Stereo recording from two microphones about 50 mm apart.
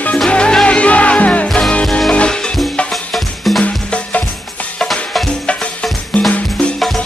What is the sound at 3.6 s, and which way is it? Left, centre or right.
Music, left.